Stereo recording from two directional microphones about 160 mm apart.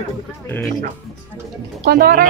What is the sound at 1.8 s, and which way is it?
Speech, 70° right (ahead or behind).